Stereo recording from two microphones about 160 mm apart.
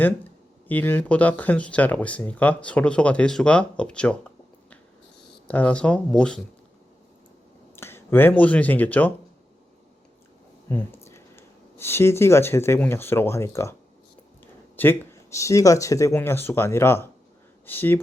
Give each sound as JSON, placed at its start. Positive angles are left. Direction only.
{"t": 0.7, "sound": "speech", "side_deg": 10}
{"t": 5.5, "sound": "speech", "side_deg": 10}
{"t": 7.8, "sound": "speech", "side_deg": 15}
{"t": 10.7, "sound": "speech", "side_deg": 15}
{"t": 14.8, "sound": "speech", "side_deg": 15}